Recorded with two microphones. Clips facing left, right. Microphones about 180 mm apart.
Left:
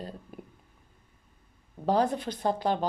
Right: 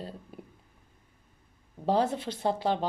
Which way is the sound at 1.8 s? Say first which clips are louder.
Left 1 dB; 25° right (ahead or behind).